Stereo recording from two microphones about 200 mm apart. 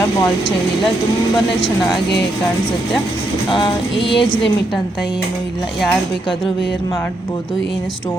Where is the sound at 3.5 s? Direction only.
25° left (ahead or behind).